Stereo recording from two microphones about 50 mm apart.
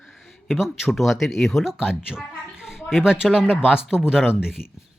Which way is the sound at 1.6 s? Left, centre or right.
Centre.